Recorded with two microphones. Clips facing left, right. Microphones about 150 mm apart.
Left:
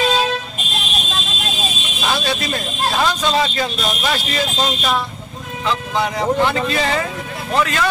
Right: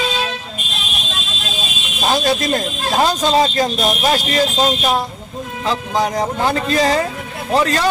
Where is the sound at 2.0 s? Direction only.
40° right (ahead or behind).